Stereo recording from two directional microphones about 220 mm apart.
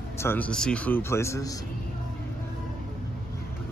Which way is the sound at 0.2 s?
10° left (ahead or behind).